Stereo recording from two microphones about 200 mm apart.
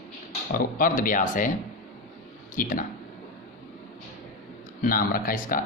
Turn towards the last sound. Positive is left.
turn(degrees=45)  # may be behind; listen again after turning